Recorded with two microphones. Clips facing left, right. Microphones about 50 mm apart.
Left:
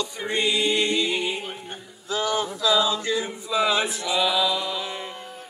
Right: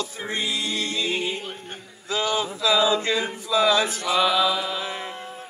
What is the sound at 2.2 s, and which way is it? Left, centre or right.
Male singing, right.